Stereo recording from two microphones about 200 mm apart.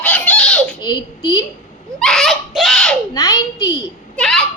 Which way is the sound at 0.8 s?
20° left (ahead or behind).